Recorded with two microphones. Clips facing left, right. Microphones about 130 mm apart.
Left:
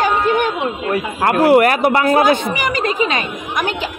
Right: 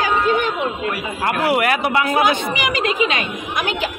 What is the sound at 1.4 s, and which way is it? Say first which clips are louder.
Speech: left 7 dB; 45° left (ahead or behind).